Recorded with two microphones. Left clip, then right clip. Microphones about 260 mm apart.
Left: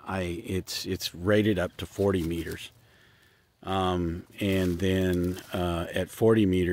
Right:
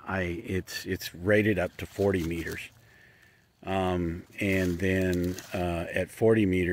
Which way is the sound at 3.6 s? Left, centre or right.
Centre.